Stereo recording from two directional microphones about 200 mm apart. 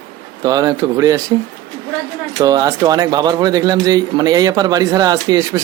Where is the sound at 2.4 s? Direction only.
20° right (ahead or behind).